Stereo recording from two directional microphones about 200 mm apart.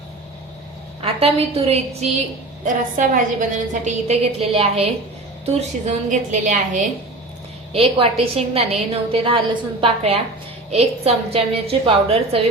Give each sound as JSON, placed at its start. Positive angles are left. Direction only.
{"t": 1.0, "sound": "a woman's voice", "side_deg": -30}